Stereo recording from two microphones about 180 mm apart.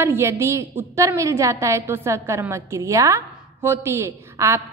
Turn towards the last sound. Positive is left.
turn(degrees=-15)  # may be behind; listen again after turning